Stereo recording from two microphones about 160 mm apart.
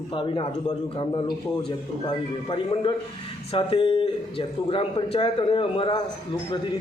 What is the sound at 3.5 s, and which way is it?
Speech, 35° left (ahead or behind).